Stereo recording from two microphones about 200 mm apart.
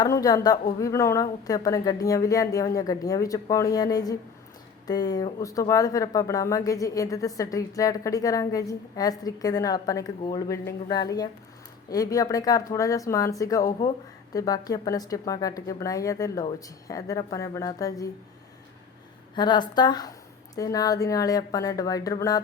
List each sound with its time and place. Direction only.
0.0 s a woman's voice: 20° left (ahead or behind)
19.4 s a woman's voice: 20° left (ahead or behind)